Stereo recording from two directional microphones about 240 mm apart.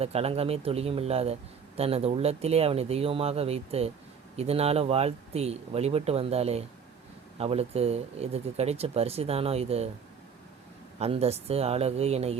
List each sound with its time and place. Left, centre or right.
0.0 s a man's voice: right
11.0 s a man's voice: right